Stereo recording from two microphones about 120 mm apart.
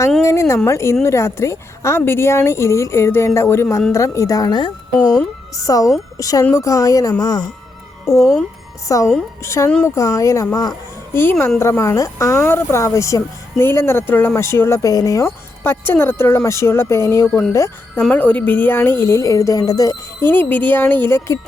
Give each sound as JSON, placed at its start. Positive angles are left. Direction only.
{"t": 0.2, "sound": "speech", "side_deg": 25}
{"t": 8.2, "sound": "speech", "side_deg": 0}
{"t": 8.9, "sound": "speech", "side_deg": 25}
{"t": 11.1, "sound": "speech", "side_deg": 20}
{"t": 18.1, "sound": "speech", "side_deg": 10}
{"t": 20.3, "sound": "speech", "side_deg": 15}